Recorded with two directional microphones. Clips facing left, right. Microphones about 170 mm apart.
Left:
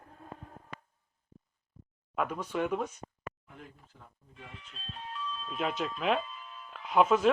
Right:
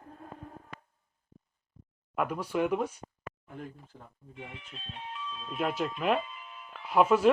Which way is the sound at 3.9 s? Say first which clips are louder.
Right 5 dB; 40° right (ahead or behind).